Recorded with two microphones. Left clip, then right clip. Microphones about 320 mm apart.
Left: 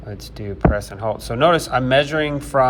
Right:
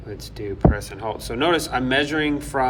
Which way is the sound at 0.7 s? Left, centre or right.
Centre.